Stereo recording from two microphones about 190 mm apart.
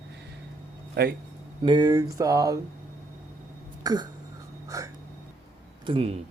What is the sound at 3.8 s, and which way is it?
Speech, 20° right (ahead or behind).